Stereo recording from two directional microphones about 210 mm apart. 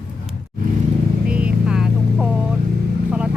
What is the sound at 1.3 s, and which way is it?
Vehicle, 5° right (ahead or behind).